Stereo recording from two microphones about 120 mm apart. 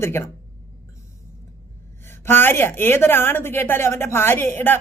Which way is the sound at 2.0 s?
20° left (ahead or behind).